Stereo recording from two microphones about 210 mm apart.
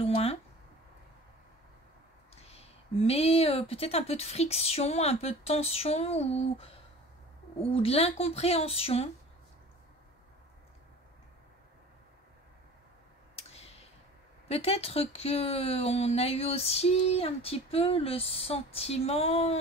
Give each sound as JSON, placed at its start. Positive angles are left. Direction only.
{"t": 0.0, "sound": "a sound", "side_deg": 30}
{"t": 2.4, "sound": "speech", "side_deg": 30}
{"t": 7.7, "sound": "speech", "side_deg": 30}
{"t": 13.4, "sound": "clicking", "side_deg": 30}
{"t": 14.5, "sound": "speech", "side_deg": 30}